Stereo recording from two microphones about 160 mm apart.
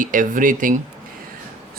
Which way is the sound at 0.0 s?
55° right (ahead or behind).